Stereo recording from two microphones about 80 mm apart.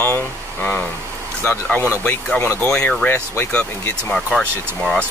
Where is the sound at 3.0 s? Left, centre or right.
Left.